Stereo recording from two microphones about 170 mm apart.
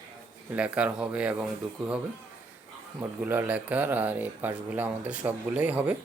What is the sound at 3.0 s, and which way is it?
Speech, 10° right (ahead or behind).